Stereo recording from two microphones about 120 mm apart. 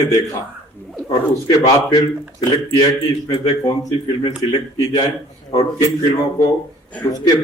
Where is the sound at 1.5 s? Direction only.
35° left (ahead or behind).